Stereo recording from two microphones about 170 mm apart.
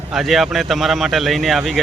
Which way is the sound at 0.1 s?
Centre (ahead or behind).